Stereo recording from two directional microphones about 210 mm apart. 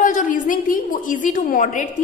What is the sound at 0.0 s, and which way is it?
A woman's voice, 40° left (ahead or behind).